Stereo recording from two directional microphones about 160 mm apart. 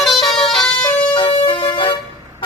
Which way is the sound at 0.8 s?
30° left (ahead or behind).